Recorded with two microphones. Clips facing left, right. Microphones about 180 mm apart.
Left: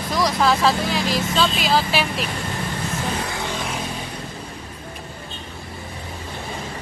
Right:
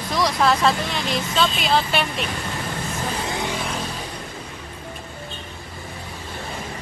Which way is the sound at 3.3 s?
20° right (ahead or behind).